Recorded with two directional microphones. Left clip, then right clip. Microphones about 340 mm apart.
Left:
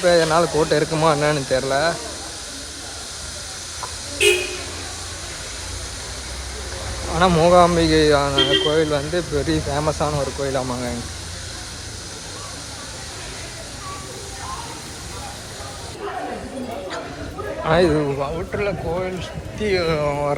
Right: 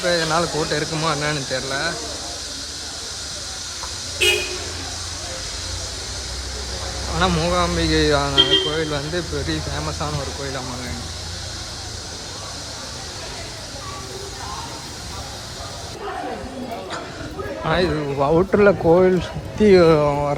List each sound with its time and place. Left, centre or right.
0.0 s speech: centre
7.2 s speech: centre
17.6 s speech: centre
18.2 s speech: centre